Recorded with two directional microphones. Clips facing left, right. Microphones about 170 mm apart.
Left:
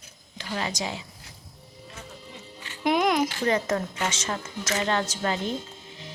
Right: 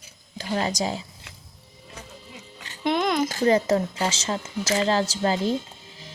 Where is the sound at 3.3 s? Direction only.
35° right (ahead or behind).